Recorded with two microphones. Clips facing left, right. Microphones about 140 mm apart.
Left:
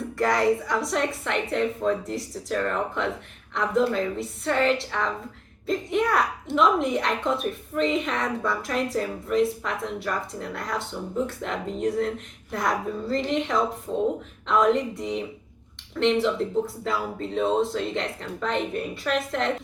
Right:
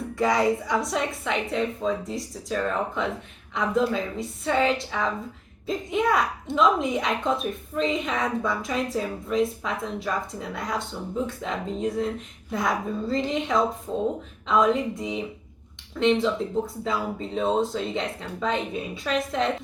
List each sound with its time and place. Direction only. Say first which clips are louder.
0.2 s a woman's voice: even; centre (ahead or behind)